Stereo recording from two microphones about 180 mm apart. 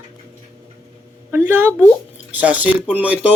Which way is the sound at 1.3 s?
10° right (ahead or behind).